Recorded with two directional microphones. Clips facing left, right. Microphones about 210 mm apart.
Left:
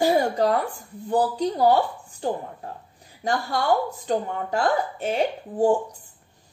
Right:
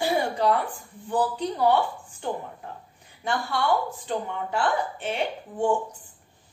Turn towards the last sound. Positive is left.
turn(degrees=40)  # may be behind; listen again after turning